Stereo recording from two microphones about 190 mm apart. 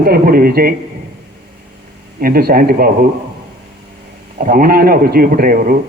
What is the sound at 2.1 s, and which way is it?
Speech, 50° right (ahead or behind).